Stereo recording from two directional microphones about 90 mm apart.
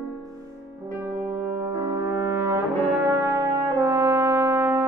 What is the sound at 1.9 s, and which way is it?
Brass instrument, 35° right (ahead or behind).